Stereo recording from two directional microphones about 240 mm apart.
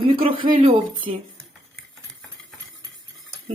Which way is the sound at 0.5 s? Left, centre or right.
Right.